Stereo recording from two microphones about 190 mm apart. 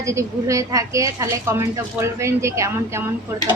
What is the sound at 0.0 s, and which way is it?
Speech, 15° right (ahead or behind).